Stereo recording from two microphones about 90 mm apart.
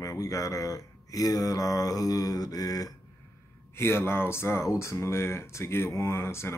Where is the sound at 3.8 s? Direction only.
25° left (ahead or behind).